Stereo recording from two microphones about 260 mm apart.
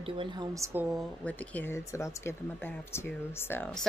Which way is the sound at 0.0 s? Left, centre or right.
Centre.